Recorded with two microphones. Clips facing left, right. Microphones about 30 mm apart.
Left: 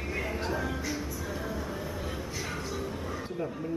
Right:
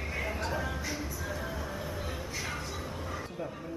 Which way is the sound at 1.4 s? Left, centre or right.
Centre.